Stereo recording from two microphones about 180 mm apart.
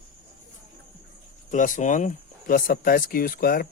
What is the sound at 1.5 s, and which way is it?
Speech, 45° left (ahead or behind).